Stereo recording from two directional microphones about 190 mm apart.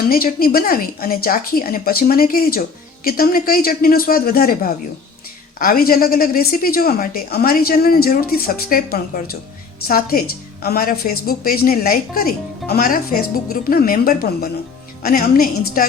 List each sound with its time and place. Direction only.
0.1 s a woman's voice: 50° left (ahead or behind)